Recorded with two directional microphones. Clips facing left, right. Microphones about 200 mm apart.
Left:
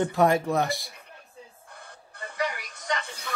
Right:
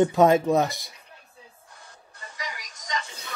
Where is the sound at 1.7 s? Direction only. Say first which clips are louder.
Left 3 dB; 60° left (ahead or behind).